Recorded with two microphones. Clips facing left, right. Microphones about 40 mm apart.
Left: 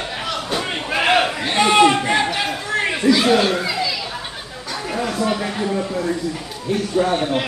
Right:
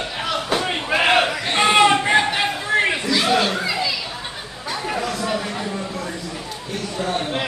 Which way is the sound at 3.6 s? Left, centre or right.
Centre.